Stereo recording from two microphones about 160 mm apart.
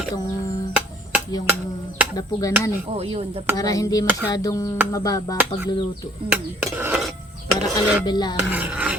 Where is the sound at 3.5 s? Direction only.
20° left (ahead or behind).